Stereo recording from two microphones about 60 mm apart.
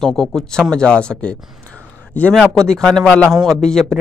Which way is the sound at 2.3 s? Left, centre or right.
Centre.